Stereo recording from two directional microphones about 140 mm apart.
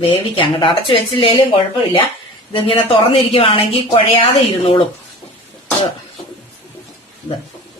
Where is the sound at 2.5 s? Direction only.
40° left (ahead or behind).